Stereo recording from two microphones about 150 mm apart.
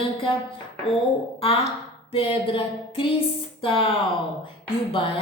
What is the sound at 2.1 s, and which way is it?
A woman's voice, 40° left (ahead or behind).